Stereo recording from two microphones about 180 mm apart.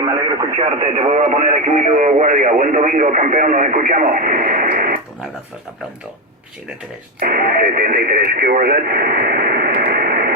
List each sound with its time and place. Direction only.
0.0 s radio: 20° right (ahead or behind)
0.8 s speech: 35° right (ahead or behind); by 4.9 s 50° right (ahead or behind)
7.2 s speech: 55° right (ahead or behind)